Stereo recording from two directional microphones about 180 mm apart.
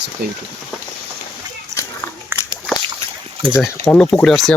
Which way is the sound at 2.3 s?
15° right (ahead or behind).